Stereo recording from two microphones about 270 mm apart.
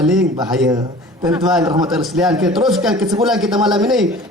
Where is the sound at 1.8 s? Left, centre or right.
Centre.